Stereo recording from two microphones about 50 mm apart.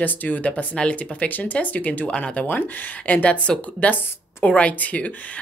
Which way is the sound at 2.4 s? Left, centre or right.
Left.